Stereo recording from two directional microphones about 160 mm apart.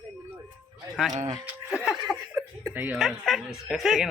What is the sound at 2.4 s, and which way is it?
Chuckle, 10° right (ahead or behind).